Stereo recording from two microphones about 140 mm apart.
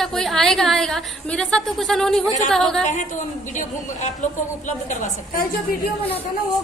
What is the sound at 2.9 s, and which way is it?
A woman's voice, 65° left (ahead or behind).